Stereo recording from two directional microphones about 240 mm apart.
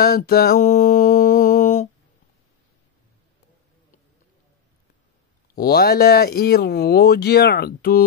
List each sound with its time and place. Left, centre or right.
0.0 s mantra: left
5.5 s speech: left